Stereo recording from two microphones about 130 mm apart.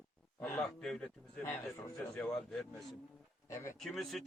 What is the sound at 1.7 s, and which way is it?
Speech, 25° left (ahead or behind).